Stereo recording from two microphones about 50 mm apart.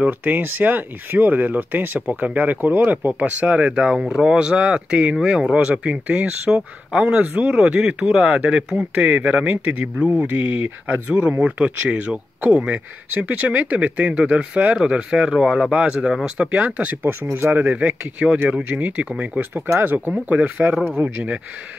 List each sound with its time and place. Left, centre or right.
0.0 s speech: right
6.5 s speech: centre
7.2 s speech: right
7.5 s speech: centre
11.2 s speech: right
19.5 s speech: right
20.1 s speech: right